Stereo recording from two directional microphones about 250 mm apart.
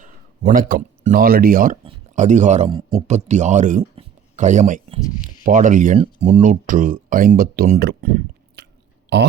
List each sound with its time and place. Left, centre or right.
0.0 s speech: right